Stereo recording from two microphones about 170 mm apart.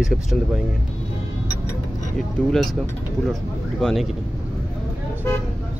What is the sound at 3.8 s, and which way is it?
Speech, 5° left (ahead or behind).